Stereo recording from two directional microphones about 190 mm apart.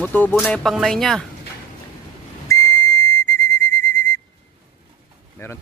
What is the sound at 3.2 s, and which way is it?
Whistle, 10° left (ahead or behind).